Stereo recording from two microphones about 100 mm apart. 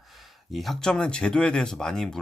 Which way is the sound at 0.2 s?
Centre (ahead or behind).